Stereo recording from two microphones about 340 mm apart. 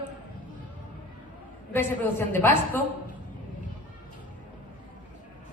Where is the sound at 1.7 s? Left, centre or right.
Centre.